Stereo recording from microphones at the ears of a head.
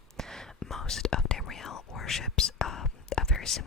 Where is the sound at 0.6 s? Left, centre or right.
Left.